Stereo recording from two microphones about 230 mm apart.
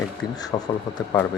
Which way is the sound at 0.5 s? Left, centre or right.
Centre.